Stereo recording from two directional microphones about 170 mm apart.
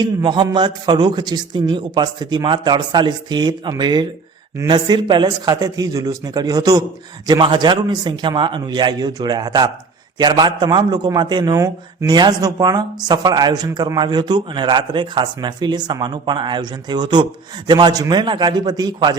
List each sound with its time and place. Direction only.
0.0 s a man's voice: 25° right (ahead or behind)